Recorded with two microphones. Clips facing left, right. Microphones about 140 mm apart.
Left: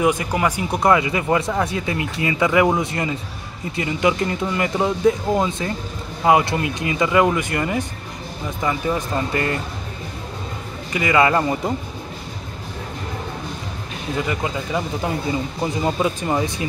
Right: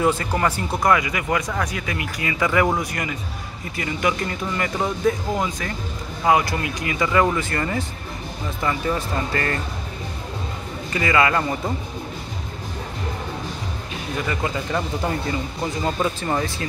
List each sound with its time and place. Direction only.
0.0 s speech: 15° left (ahead or behind)
10.9 s speech: 20° left (ahead or behind)
14.1 s speech: 20° left (ahead or behind)
15.6 s speech: 15° left (ahead or behind)